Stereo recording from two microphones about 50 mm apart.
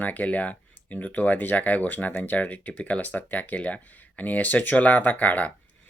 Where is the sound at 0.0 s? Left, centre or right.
Left.